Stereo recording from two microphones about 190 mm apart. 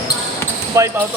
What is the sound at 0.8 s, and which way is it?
Speech, 15° right (ahead or behind).